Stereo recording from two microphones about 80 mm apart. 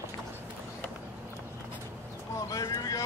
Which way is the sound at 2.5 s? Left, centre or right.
Left.